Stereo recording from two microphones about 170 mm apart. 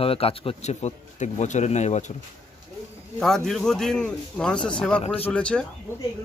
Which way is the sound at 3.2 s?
Centre (ahead or behind).